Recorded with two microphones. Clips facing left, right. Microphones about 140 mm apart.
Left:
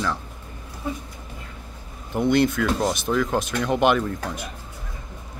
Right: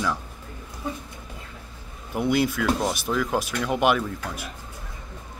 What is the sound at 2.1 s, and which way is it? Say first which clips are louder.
Speech: left 3 dB; 5° right (ahead or behind).